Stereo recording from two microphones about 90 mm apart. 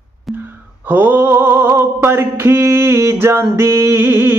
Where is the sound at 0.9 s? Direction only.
20° right (ahead or behind).